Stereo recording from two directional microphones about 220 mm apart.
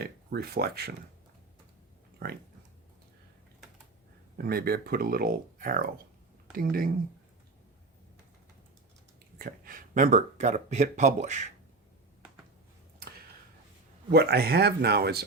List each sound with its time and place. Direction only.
0.0 s speech: 45° right (ahead or behind)
2.2 s speech: 45° right (ahead or behind)
4.4 s speech: 45° right (ahead or behind)
9.4 s speech: 40° right (ahead or behind)
14.1 s speech: 45° right (ahead or behind)